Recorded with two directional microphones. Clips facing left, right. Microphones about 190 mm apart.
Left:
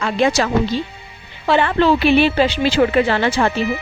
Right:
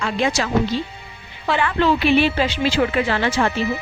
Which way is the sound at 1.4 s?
30° left (ahead or behind).